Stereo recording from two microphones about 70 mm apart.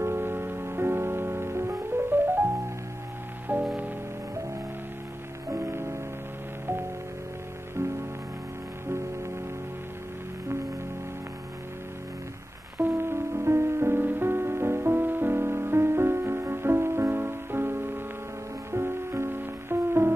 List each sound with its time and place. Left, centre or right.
0.0 s music: right
3.5 s music: right
5.5 s music: right
8.8 s music: right
12.8 s music: right